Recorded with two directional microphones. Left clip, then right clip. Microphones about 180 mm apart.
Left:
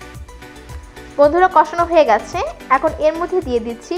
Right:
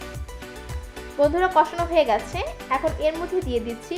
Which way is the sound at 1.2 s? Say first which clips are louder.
Left 7 dB; 20° left (ahead or behind).